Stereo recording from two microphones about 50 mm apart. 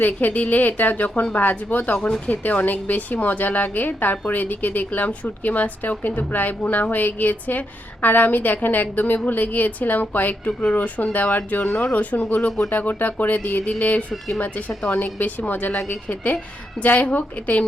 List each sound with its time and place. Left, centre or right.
0.0 s a woman's voice: left